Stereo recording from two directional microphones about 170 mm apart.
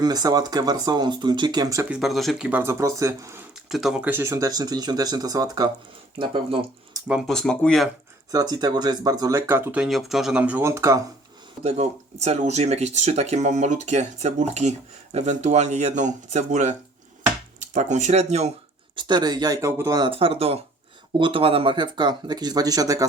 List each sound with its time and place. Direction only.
0.0 s speech: 20° right (ahead or behind)
1.9 s speech: centre (ahead or behind); by 3.4 s 20° right (ahead or behind)
3.5 s speech: centre (ahead or behind); by 6.6 s 30° right (ahead or behind)
7.1 s speech: centre (ahead or behind)
8.3 s speech: 20° right (ahead or behind)
11.6 s speech: 40° right (ahead or behind)
18.9 s speech: 25° right (ahead or behind)